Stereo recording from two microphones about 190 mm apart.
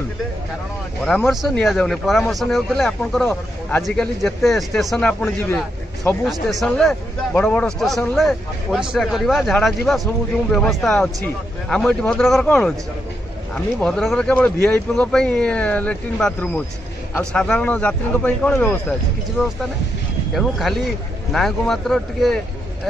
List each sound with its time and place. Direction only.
1.0 s speech: centre (ahead or behind)
13.7 s speech: 5° left (ahead or behind)